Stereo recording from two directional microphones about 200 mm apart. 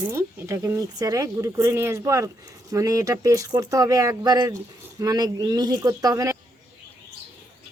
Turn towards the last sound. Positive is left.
turn(degrees=-15)  # may be behind; listen again after turning